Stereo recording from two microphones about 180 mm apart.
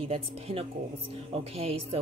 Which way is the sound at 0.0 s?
30° right (ahead or behind).